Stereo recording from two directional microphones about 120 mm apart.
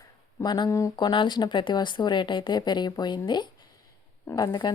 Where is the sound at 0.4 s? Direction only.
35° left (ahead or behind).